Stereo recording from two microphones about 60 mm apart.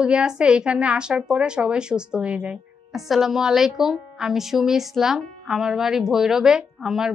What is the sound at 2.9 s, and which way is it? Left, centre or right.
A woman's voice, centre.